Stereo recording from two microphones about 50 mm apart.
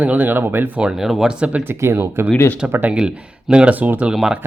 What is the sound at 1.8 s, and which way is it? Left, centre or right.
Speech, right.